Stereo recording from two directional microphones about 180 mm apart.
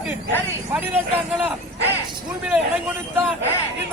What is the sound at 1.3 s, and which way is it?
Speech, 5° right (ahead or behind).